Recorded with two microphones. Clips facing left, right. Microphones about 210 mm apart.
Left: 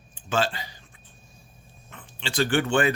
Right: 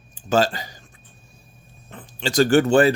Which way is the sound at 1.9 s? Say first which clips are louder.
Right 8 dB; 40° right (ahead or behind).